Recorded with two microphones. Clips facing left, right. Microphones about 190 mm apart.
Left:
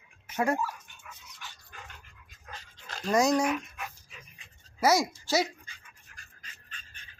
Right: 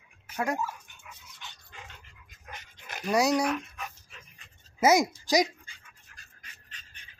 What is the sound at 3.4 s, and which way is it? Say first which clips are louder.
Dog: even; 5° left (ahead or behind).